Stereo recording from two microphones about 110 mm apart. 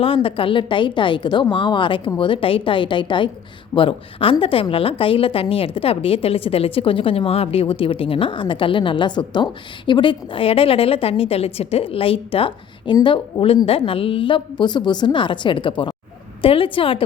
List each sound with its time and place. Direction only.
0.0 s a woman's voice: 55° left (ahead or behind)